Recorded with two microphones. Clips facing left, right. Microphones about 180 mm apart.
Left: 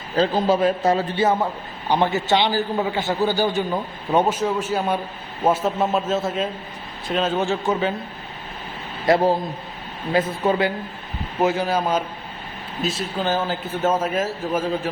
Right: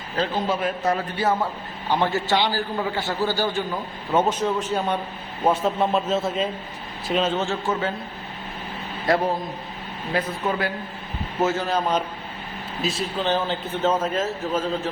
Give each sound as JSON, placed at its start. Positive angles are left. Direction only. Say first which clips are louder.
{"t": 0.2, "sound": "a man's voice", "louder": "left 6 dB", "side_deg": 30}
{"t": 4.4, "sound": "a man's voice", "louder": "left 1 dB", "side_deg": 5}
{"t": 7.3, "sound": "a man's voice", "louder": "left 3 dB", "side_deg": 15}
{"t": 9.0, "sound": "a man's voice", "louder": "left 4 dB", "side_deg": 25}
{"t": 11.4, "sound": "a man's voice", "louder": "left 3 dB", "side_deg": 15}